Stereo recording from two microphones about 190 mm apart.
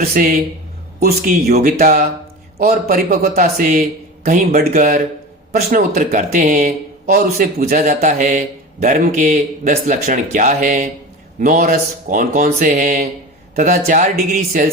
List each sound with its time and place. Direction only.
0.0 s speech: 50° right (ahead or behind)